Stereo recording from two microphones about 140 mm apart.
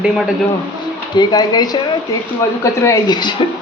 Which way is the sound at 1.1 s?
30° left (ahead or behind).